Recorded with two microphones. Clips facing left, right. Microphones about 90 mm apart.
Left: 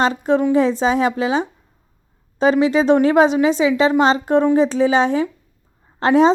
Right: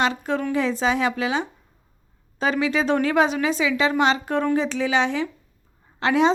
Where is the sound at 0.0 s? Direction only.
35° left (ahead or behind).